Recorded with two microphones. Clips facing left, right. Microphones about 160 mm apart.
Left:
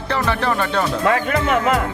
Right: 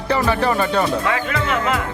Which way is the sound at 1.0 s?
50° left (ahead or behind).